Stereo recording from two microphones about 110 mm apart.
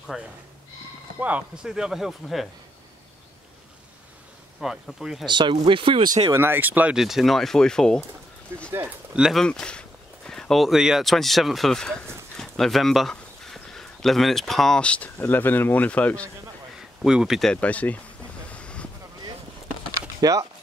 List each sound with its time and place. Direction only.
0.1 s speech: 5° right (ahead or behind)
4.6 s speech: 5° right (ahead or behind)
5.2 s speech: 45° right (ahead or behind)
6.3 s speech: 20° right (ahead or behind)
7.0 s speech: centre (ahead or behind)
8.5 s speech: 20° right (ahead or behind)
8.8 s speech: 5° right (ahead or behind)
9.4 s speech: 10° left (ahead or behind)
12.4 s a sound: 5° left (ahead or behind)
15.1 s speech: 15° left (ahead or behind)
17.0 s speech: 5° right (ahead or behind)
17.5 s speech: 15° left (ahead or behind)
18.5 s vehicle: 10° left (ahead or behind)
20.2 s speech: 30° right (ahead or behind)